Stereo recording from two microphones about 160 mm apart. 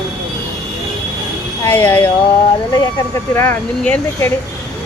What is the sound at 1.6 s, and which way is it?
Speech, 10° left (ahead or behind).